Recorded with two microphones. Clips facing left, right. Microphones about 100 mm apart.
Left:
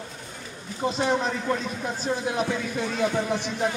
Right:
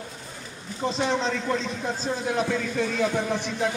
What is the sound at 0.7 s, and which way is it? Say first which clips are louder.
A man's voice: left 1 dB; 10° left (ahead or behind).